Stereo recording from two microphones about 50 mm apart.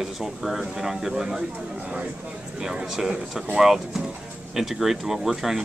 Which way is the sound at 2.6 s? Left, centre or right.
Centre.